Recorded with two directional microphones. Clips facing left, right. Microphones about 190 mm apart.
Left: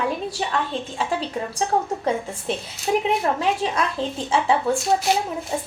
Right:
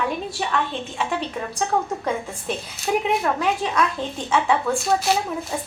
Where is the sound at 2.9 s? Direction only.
25° left (ahead or behind).